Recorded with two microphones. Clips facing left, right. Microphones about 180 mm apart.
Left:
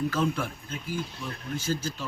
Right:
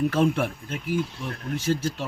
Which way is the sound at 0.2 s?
65° right (ahead or behind).